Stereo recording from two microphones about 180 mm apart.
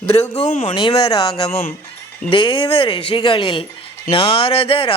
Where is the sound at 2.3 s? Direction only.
30° left (ahead or behind).